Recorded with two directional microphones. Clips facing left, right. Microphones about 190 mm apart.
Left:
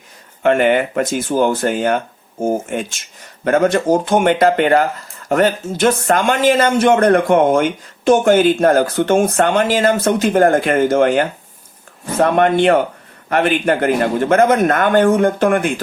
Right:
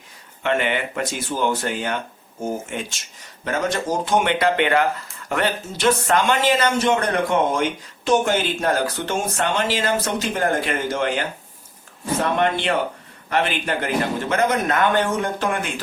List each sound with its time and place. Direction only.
0.4 s speech: 45° left (ahead or behind)